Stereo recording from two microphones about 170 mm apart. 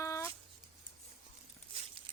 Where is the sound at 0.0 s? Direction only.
15° left (ahead or behind).